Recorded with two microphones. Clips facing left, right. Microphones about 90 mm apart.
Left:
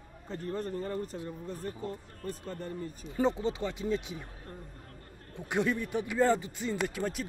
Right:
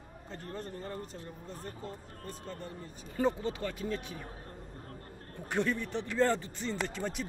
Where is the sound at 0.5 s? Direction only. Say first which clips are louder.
Left 6 dB; 45° left (ahead or behind).